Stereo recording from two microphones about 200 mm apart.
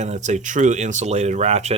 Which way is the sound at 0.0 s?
35° right (ahead or behind).